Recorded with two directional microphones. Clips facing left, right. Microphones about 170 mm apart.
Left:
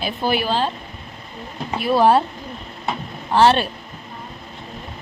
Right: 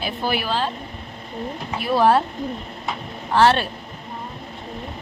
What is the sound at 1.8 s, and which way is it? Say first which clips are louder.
Speech: left 2 dB; 20° left (ahead or behind).